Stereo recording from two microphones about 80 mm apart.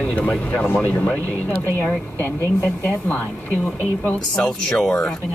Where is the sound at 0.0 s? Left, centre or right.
Centre.